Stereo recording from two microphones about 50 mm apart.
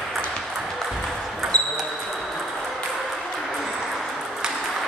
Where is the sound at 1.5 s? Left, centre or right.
Centre.